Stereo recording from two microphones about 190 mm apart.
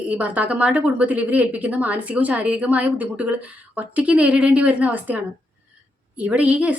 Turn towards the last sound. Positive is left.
turn(degrees=-5)  # may be behind; listen again after turning